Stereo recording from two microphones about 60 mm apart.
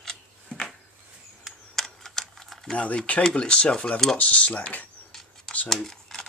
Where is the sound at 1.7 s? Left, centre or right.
Centre.